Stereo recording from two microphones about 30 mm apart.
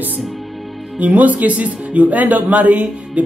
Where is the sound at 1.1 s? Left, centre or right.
Right.